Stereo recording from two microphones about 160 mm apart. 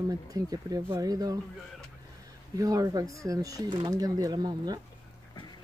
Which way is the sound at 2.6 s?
20° right (ahead or behind).